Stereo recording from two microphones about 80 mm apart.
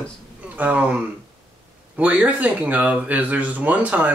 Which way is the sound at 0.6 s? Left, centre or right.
Centre.